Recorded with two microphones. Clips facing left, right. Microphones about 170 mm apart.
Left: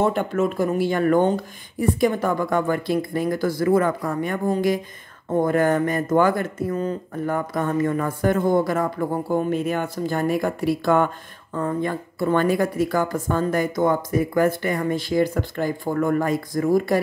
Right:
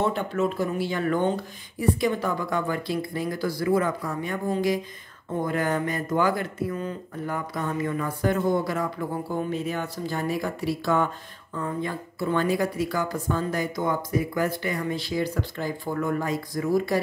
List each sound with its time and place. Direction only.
0.0 s speech: 50° left (ahead or behind)